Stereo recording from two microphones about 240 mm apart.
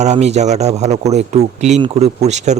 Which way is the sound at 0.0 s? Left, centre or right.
Right.